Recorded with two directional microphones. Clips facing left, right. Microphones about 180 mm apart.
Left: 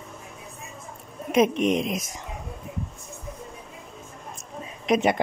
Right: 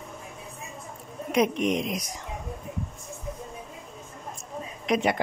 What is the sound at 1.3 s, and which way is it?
Speech, 25° left (ahead or behind).